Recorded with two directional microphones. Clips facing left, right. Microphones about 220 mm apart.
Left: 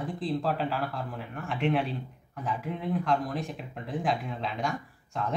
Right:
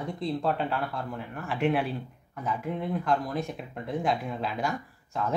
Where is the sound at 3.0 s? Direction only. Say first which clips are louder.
Right 1 dB; centre (ahead or behind).